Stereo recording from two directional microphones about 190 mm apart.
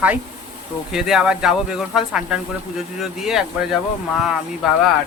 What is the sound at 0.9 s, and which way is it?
Speech, centre (ahead or behind).